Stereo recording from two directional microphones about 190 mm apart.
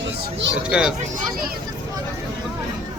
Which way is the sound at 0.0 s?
65° right (ahead or behind).